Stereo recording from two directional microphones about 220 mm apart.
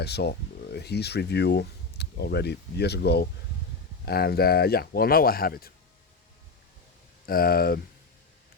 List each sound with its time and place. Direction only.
0.0 s speech: 50° left (ahead or behind)
7.3 s speech: 40° left (ahead or behind)